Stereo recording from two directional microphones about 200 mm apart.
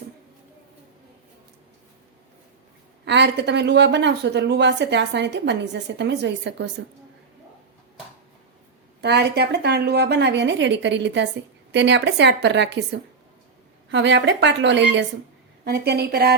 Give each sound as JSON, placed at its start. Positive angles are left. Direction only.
{"t": 3.0, "sound": "speech", "side_deg": -60}
{"t": 9.0, "sound": "a woman's voice", "side_deg": -55}